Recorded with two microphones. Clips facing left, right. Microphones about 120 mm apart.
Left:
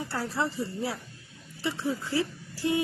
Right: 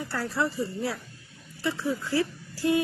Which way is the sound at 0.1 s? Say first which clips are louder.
Right 3 dB; 25° left (ahead or behind).